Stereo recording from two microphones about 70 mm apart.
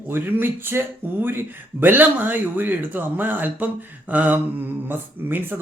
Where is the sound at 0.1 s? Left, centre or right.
Right.